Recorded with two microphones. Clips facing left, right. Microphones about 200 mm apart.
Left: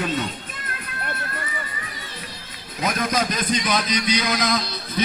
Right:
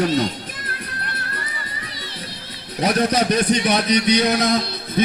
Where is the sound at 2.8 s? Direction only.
35° right (ahead or behind).